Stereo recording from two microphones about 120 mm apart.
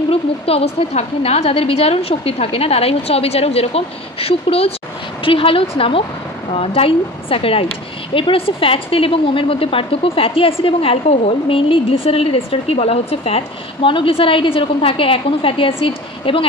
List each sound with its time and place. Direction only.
0.1 s a woman's voice: 55° left (ahead or behind)